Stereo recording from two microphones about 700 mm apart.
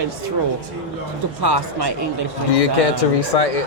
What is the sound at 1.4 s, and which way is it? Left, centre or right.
Speech, right.